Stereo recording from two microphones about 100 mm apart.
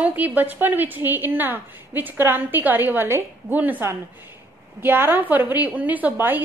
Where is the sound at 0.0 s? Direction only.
15° right (ahead or behind).